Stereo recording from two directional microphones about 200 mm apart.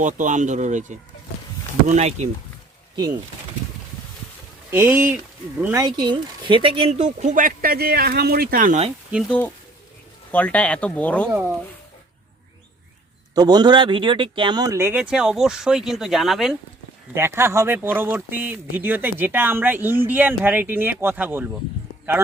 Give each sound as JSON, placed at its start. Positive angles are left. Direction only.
{"t": 0.0, "sound": "speech", "side_deg": -40}
{"t": 4.7, "sound": "speech", "side_deg": -10}
{"t": 5.8, "sound": "speech", "side_deg": -20}
{"t": 10.3, "sound": "speech", "side_deg": 5}
{"t": 13.3, "sound": "speech", "side_deg": -20}
{"t": 17.2, "sound": "speech", "side_deg": -10}